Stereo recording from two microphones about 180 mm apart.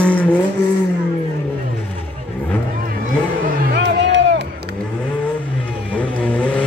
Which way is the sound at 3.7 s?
75° right (ahead or behind).